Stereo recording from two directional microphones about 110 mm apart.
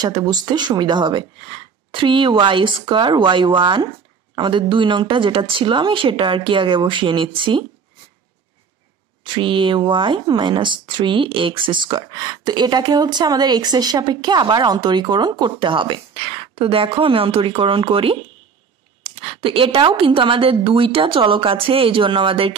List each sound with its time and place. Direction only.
0.0 s speech: 40° right (ahead or behind)
9.2 s speech: 50° right (ahead or behind)